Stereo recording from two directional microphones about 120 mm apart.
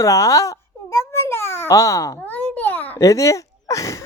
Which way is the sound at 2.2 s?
15° left (ahead or behind).